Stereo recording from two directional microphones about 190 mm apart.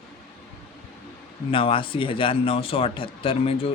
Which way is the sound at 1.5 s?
30° left (ahead or behind).